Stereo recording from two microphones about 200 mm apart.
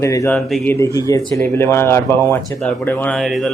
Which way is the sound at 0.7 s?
15° left (ahead or behind).